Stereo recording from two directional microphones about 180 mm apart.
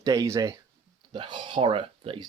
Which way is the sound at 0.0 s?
20° right (ahead or behind).